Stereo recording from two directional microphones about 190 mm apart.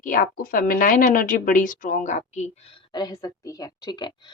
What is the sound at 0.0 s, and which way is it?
Speech, 45° left (ahead or behind).